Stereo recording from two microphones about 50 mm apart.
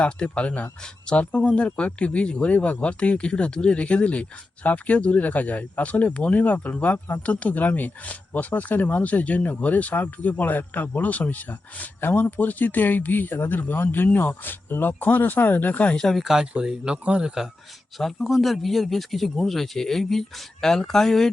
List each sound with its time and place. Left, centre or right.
0.0 s speech: left
16.2 s speech: centre